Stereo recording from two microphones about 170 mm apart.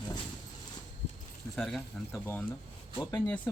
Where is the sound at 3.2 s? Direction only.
5° left (ahead or behind).